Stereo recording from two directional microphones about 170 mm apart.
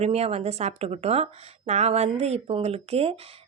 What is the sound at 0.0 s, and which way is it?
Speech, 35° right (ahead or behind).